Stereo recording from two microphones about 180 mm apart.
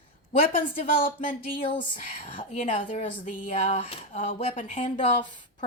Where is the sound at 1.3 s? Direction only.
50° left (ahead or behind).